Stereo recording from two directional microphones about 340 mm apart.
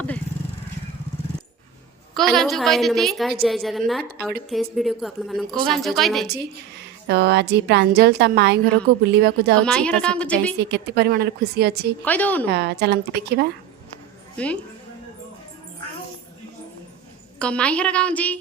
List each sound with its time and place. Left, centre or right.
2.1 s a woman's voice: centre
6.2 s a woman's voice: right
9.6 s a woman's voice: centre
10.6 s a woman's voice: right
12.0 s a woman's voice: centre
12.5 s a woman's voice: right
14.3 s a woman's voice: centre
17.4 s a woman's voice: centre